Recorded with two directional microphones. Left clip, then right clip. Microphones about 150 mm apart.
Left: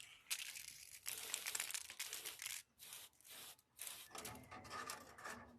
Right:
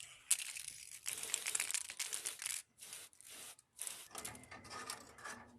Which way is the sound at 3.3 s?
15° right (ahead or behind).